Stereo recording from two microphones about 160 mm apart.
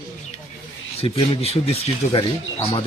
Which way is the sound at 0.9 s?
35° left (ahead or behind).